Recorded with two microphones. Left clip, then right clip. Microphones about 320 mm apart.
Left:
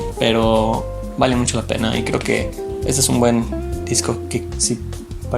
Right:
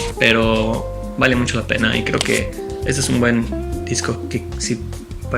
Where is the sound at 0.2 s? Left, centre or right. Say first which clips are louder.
Even; centre.